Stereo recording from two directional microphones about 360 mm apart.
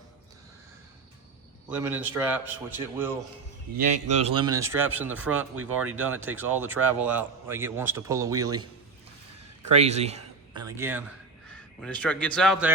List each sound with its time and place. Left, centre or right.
1.7 s a man's voice: centre
4.2 s a man's voice: centre
5.3 s speech: right
6.0 s a man's voice: centre
9.7 s a man's voice: centre